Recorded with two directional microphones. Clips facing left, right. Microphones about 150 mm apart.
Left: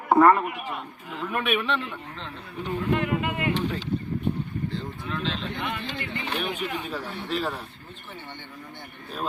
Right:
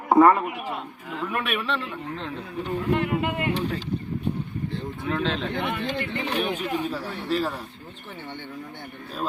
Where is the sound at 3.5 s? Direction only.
40° right (ahead or behind).